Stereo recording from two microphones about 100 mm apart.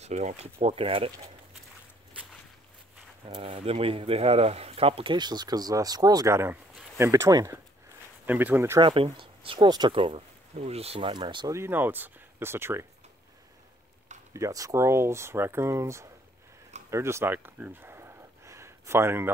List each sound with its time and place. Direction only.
0.0 s speech: 90° right; by 1.1 s 70° right (ahead or behind)
3.3 s speech: 55° right (ahead or behind); by 5.1 s 70° right (ahead or behind)
5.1 s speech: 45° right (ahead or behind)
8.3 s speech: 20° right (ahead or behind)
8.8 s speech: 60° right (ahead or behind)
9.7 s speech: 45° right (ahead or behind)
9.9 s speech: 65° right (ahead or behind); by 11.1 s 85° right
11.1 s speech: 50° right (ahead or behind)
11.4 s speech: 25° right (ahead or behind)
14.3 s speech: 35° right (ahead or behind)
16.9 s a sound: 25° right (ahead or behind)